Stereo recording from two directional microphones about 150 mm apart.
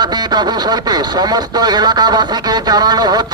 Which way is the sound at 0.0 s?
30° right (ahead or behind).